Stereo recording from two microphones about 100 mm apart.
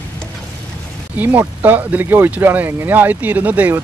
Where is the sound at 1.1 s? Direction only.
20° right (ahead or behind).